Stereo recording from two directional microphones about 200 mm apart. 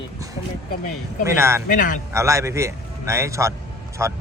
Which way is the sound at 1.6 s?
40° left (ahead or behind).